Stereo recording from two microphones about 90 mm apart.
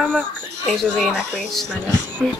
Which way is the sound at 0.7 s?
5° left (ahead or behind).